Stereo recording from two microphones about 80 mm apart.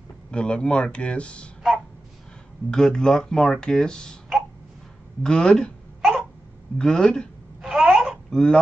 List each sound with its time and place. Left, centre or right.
0.3 s speech: centre
2.7 s speech: centre
5.2 s hiccup: centre
6.8 s speech: centre
7.6 s wail: centre